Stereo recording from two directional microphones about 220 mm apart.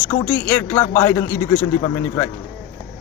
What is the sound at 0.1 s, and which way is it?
Speech, 20° left (ahead or behind).